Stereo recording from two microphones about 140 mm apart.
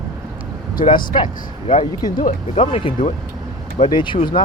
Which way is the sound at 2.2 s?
50° left (ahead or behind).